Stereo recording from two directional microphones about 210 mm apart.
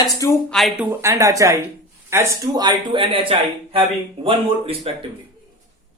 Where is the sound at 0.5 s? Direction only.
Centre (ahead or behind).